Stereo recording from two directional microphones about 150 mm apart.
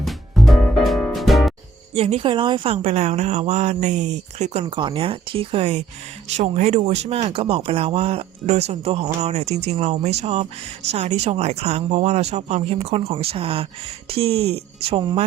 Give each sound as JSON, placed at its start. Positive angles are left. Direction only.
{"t": 0.0, "sound": "music", "side_deg": 0}
{"t": 1.9, "sound": "speech", "side_deg": -45}
{"t": 4.6, "sound": "speech", "side_deg": -30}